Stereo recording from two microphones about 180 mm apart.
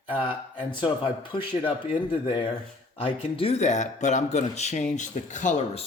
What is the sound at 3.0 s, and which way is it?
Speech, 30° left (ahead or behind).